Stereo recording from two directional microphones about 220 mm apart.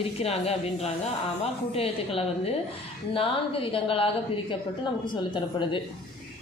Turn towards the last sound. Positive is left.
turn(degrees=20)  # may be behind; listen again after turning